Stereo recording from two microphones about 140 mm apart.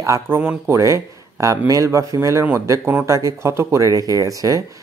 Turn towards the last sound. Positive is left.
turn(degrees=-25)  # may be behind; listen again after turning